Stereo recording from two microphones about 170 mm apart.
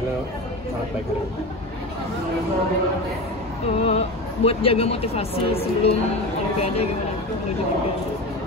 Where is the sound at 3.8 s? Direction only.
35° left (ahead or behind).